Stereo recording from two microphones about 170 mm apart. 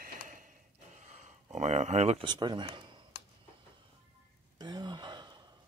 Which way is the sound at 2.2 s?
25° right (ahead or behind).